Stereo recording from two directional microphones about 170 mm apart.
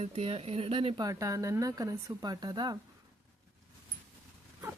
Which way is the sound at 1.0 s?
20° right (ahead or behind).